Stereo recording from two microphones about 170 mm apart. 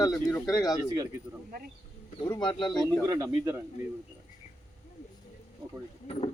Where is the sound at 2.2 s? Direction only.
25° left (ahead or behind).